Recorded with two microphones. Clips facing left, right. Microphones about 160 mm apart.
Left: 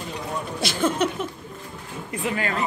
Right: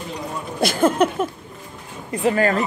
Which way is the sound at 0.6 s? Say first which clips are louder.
Right 6 dB; 50° right (ahead or behind).